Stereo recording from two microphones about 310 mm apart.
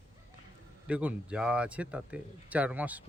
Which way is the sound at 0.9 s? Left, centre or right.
Centre.